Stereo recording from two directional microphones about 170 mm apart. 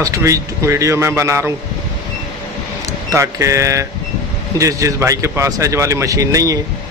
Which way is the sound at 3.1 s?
20° right (ahead or behind).